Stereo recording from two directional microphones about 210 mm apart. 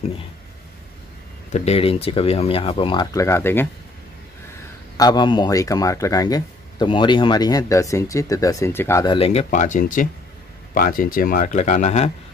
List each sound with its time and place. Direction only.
1.5 s speech: 30° left (ahead or behind); by 3.6 s 10° left (ahead or behind)
4.9 s speech: 20° left (ahead or behind)